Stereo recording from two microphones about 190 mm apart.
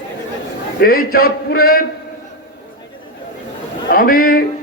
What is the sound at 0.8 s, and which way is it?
A man's voice, 50° left (ahead or behind).